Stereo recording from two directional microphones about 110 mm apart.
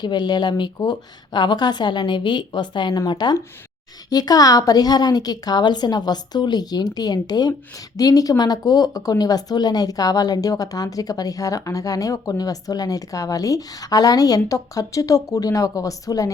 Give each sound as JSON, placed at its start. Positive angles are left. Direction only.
{"t": 0.0, "sound": "a woman's voice", "side_deg": 40}